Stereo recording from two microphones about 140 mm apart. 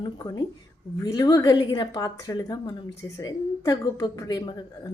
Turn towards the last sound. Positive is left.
turn(degrees=30)  # may be behind; listen again after turning